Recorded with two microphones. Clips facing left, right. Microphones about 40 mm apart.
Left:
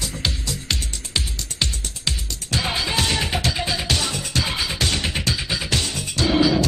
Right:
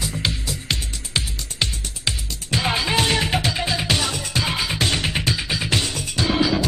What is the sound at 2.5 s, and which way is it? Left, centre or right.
Music, right.